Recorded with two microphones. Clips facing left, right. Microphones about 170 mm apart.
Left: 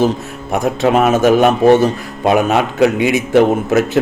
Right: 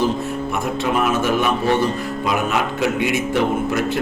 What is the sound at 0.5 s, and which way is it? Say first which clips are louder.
Speech: left 9 dB; 90° left.